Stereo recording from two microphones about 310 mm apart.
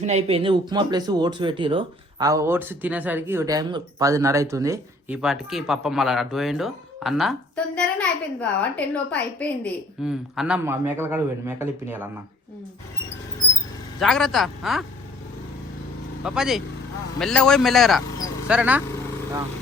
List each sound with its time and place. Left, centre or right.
0.0 s a man's voice: right
14.0 s speech: centre
16.2 s speech: centre